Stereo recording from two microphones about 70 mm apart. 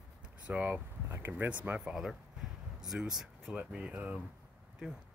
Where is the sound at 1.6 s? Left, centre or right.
Centre.